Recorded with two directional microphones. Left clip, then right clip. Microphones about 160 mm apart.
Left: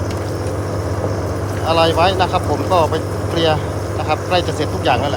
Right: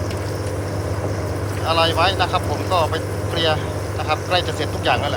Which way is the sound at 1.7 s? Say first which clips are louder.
Left 4 dB; 35° left (ahead or behind).